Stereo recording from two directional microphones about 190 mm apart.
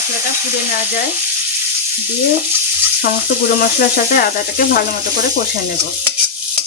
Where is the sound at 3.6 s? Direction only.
50° left (ahead or behind).